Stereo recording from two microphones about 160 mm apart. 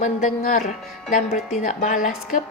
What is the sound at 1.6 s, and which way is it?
Speech, 55° left (ahead or behind).